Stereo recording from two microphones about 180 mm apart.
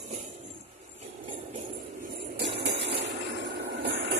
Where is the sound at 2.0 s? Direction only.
60° right (ahead or behind).